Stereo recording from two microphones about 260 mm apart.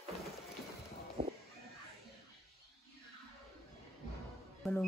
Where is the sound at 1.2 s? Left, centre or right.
Right.